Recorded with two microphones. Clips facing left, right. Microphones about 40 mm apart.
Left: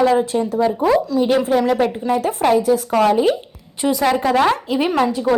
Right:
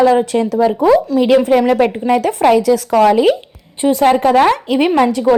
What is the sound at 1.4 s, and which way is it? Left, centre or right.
Speech, right.